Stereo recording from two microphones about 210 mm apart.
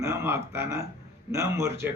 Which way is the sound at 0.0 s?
10° right (ahead or behind).